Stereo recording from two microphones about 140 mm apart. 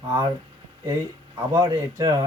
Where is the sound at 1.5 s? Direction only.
25° right (ahead or behind).